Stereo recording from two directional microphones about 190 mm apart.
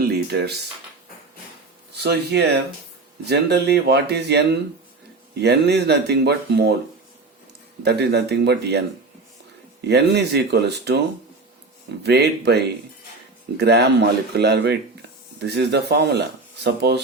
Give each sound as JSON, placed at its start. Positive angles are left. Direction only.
{"t": 0.0, "sound": "a sound", "side_deg": -60}
{"t": 2.0, "sound": "speech", "side_deg": -60}
{"t": 7.9, "sound": "speech", "side_deg": -60}
{"t": 9.8, "sound": "speech", "side_deg": -60}
{"t": 12.0, "sound": "speech", "side_deg": -60}